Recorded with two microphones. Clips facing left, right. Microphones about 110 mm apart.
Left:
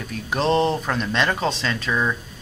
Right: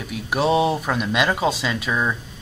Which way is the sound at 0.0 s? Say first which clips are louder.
Right 2 dB; 10° right (ahead or behind).